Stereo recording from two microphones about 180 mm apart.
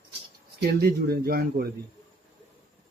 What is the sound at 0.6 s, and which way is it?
Speech, 60° right (ahead or behind).